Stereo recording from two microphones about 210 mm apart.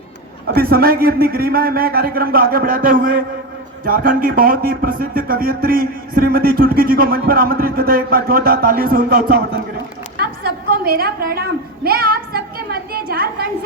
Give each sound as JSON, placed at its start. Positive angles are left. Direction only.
{"t": 0.4, "sound": "a woman's voice", "side_deg": -45}